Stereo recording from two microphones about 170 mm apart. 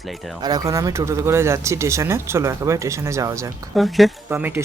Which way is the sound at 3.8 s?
Centre (ahead or behind).